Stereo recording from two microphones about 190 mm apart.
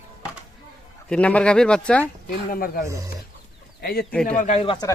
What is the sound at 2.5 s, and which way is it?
Speech, 50° left (ahead or behind).